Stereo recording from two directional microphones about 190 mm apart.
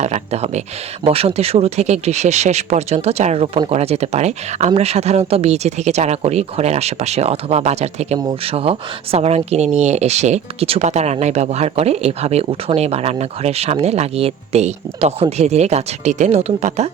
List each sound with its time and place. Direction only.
0.0 s speech: 35° right (ahead or behind)